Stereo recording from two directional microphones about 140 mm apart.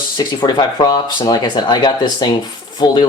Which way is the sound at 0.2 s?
30° left (ahead or behind).